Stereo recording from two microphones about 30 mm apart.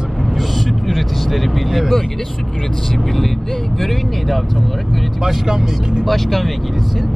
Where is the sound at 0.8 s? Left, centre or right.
Centre.